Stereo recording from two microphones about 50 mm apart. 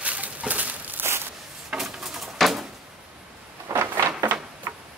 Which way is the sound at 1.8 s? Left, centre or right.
Centre.